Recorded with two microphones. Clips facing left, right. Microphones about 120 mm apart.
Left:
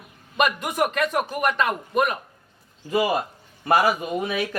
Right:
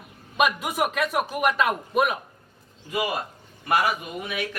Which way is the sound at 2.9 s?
35° left (ahead or behind).